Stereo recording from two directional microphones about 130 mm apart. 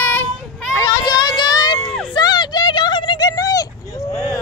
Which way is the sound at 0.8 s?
30° left (ahead or behind).